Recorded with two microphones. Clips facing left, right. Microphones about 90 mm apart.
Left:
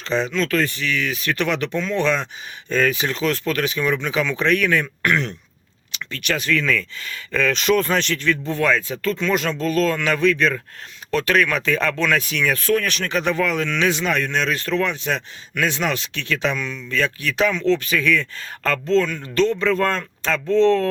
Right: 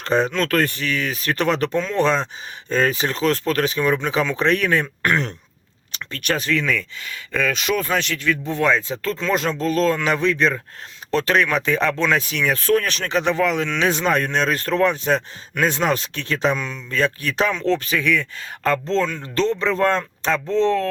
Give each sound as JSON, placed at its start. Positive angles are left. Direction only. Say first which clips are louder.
{"t": 0.0, "sound": "speech", "louder": "right 2 dB", "side_deg": -50}
{"t": 6.5, "sound": "speech", "louder": "left 1 dB", "side_deg": -20}
{"t": 8.4, "sound": "speech", "louder": "right 2 dB", "side_deg": -20}
{"t": 13.9, "sound": "speech", "louder": "right 2 dB", "side_deg": -40}
{"t": 17.9, "sound": "speech", "louder": "left 1 dB", "side_deg": -15}
{"t": 18.9, "sound": "speech", "louder": "left 2 dB", "side_deg": -30}